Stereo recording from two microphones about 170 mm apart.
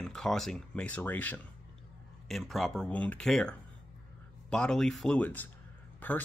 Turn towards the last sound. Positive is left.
turn(degrees=10)  # may be behind; listen again after turning